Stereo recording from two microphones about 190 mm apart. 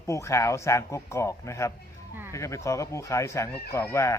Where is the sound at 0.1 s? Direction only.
15° left (ahead or behind).